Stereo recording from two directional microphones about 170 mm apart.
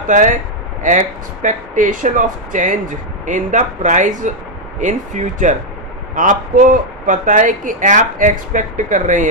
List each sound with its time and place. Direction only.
0.1 s speech: 50° right (ahead or behind)